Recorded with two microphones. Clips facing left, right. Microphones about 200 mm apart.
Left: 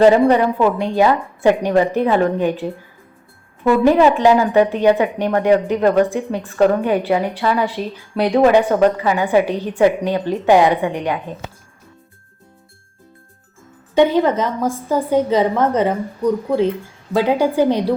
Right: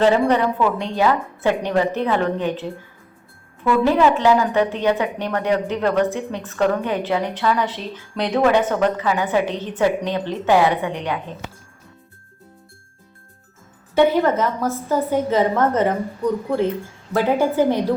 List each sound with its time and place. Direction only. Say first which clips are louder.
0.0 s a woman's voice: left 5 dB; 10° left (ahead or behind)
13.9 s a woman's voice: left 2 dB; 15° left (ahead or behind)